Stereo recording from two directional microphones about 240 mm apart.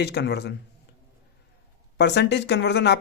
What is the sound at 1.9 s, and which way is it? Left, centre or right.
Speech, left.